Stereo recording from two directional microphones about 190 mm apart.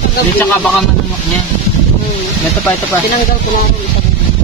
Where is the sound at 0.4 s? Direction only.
5° left (ahead or behind).